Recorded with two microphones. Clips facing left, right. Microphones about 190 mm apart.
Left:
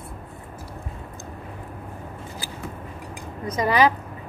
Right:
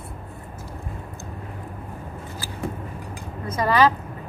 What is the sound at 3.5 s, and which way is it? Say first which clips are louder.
Speech: even; 15° left (ahead or behind).